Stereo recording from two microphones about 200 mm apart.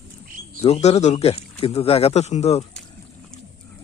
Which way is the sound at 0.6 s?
30° left (ahead or behind).